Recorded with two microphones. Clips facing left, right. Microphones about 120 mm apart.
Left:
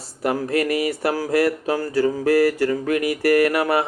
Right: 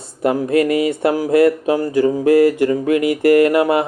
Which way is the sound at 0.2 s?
25° right (ahead or behind).